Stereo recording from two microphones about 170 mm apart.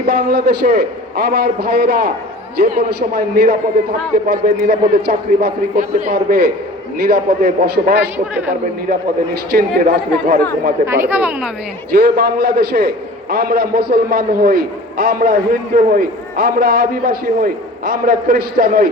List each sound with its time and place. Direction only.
0.0 s a man's voice: 65° right (ahead or behind)
10.8 s speech: 15° right (ahead or behind)
11.9 s a man's voice: 65° right (ahead or behind)